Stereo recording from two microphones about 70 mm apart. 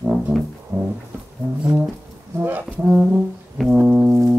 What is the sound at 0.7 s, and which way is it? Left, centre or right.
Music, right.